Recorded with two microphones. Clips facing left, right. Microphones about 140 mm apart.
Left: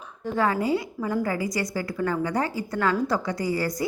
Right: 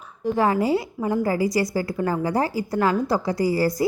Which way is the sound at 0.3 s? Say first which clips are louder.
Right 3 dB; 25° right (ahead or behind).